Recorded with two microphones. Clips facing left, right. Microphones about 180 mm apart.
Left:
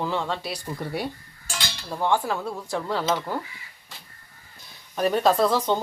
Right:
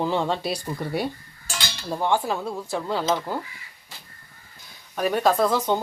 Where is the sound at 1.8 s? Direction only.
10° right (ahead or behind).